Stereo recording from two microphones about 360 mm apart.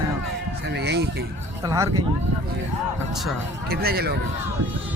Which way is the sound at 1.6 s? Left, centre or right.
Centre.